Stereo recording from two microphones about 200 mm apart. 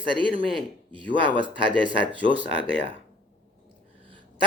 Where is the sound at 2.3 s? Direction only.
65° left (ahead or behind).